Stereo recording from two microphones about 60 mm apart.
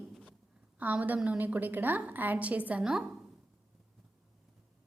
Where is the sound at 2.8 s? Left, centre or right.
Centre.